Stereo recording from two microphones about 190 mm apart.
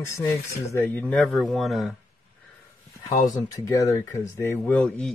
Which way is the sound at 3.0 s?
20° left (ahead or behind).